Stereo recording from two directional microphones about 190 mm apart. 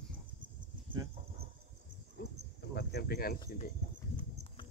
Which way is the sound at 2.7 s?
60° left (ahead or behind).